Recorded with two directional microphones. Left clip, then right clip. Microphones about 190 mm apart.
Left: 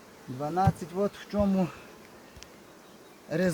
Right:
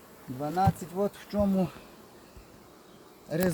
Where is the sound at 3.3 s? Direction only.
5° left (ahead or behind).